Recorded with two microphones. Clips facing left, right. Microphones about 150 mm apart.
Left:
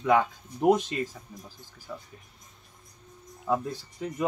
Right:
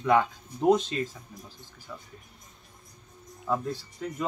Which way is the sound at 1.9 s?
25° left (ahead or behind).